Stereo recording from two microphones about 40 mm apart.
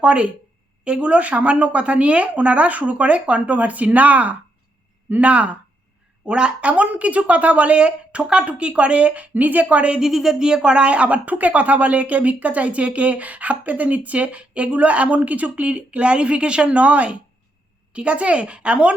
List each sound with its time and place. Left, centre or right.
0.0 s speech: right
10.0 s a woman's voice: centre
10.3 s speech: centre